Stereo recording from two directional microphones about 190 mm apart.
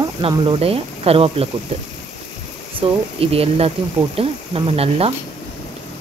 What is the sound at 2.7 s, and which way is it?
Speech, 30° right (ahead or behind).